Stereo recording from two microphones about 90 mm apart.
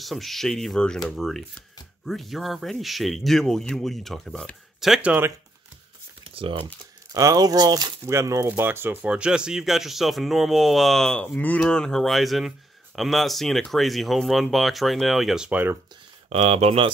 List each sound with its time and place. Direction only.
0.0 s speech: centre (ahead or behind)
6.3 s speech: 75° right (ahead or behind)
7.2 s speech: 40° right (ahead or behind)
8.0 s speech: 35° right (ahead or behind)
8.5 s speech: 25° right (ahead or behind)
9.0 s speech: 10° right (ahead or behind); by 11.3 s 5° left (ahead or behind)
11.3 s speech: 15° left (ahead or behind); by 15.5 s 5° right (ahead or behind)
15.5 s speech: 25° right (ahead or behind)
16.4 s speech: 90° right